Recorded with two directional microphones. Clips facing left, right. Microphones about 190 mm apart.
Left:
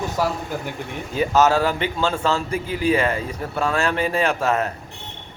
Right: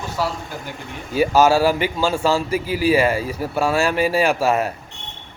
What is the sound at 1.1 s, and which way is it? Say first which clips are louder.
A man's voice: right 3 dB; 10° right (ahead or behind).